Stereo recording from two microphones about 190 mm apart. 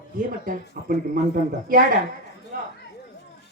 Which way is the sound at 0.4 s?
45° right (ahead or behind).